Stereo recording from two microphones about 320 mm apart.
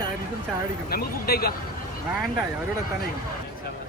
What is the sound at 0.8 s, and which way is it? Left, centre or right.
Speech, left.